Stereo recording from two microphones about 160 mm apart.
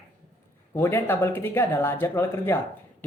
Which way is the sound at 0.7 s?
15° left (ahead or behind).